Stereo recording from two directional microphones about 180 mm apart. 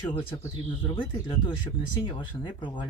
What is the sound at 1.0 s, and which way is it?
Speech, 30° left (ahead or behind).